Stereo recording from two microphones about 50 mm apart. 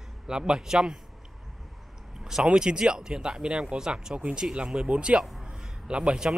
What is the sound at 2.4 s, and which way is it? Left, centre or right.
Speech, centre.